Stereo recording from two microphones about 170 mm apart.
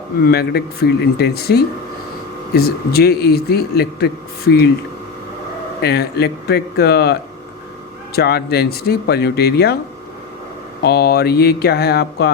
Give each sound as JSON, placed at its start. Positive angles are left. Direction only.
{"t": 0.3, "sound": "a man's voice", "side_deg": 70}
{"t": 5.8, "sound": "a man's voice", "side_deg": 70}
{"t": 10.8, "sound": "a man's voice", "side_deg": 70}